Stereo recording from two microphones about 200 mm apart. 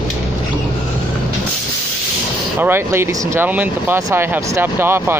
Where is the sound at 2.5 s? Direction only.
10° right (ahead or behind).